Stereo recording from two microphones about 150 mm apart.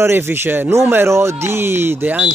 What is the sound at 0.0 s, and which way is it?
Speech, 15° right (ahead or behind).